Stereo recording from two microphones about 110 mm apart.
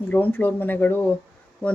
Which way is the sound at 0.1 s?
15° left (ahead or behind).